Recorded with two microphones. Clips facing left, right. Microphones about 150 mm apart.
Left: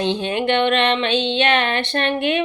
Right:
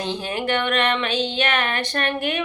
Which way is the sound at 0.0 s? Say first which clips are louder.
Left 5 dB; 25° left (ahead or behind).